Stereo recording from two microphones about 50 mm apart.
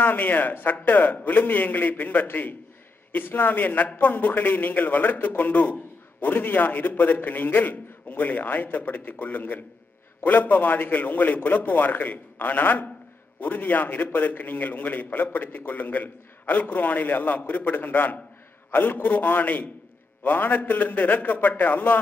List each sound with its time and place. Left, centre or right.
0.0 s a man's voice: left